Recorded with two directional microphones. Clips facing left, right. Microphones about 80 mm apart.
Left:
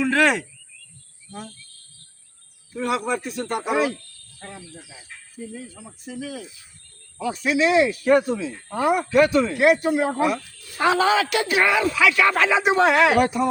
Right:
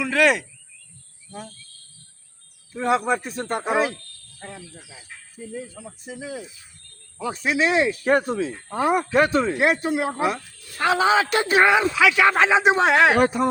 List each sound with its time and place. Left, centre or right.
0.0 s speech: left
1.3 s speech: centre
2.7 s speech: right
6.1 s speech: right